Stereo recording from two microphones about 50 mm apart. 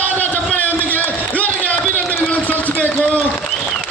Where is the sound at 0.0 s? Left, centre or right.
Left.